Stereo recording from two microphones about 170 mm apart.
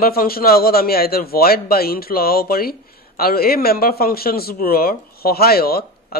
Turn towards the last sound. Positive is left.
turn(degrees=65)  # may be behind; listen again after turning